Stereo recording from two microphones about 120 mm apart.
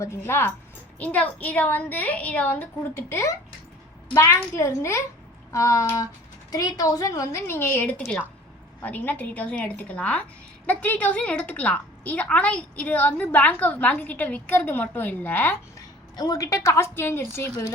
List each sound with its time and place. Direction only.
0.0 s a woman's voice: 20° left (ahead or behind)
16.1 s a woman's voice: 30° left (ahead or behind)